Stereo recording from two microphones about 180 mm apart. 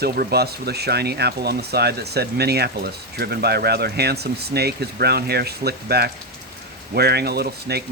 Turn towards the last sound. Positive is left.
turn(degrees=-65)  # may be behind; listen again after turning